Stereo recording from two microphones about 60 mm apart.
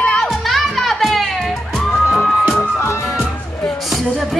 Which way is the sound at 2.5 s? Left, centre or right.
Left.